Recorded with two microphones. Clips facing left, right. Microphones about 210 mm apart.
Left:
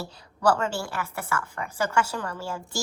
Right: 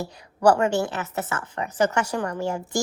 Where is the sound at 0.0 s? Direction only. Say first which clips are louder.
Right 5 dB; 15° right (ahead or behind).